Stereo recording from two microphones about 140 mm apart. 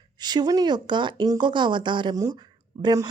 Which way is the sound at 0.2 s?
30° right (ahead or behind).